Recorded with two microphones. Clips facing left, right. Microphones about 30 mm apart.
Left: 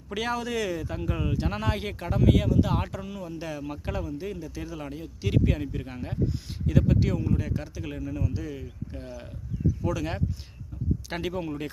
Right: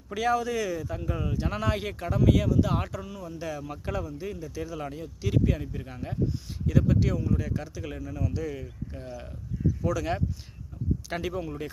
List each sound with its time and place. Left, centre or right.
0.1 s speech: left
1.5 s speech: left
1.7 s speech: centre
2.0 s speech: left
4.7 s speech: centre
5.2 s speech: left
7.9 s speech: centre
9.8 s speech: centre
11.1 s speech: centre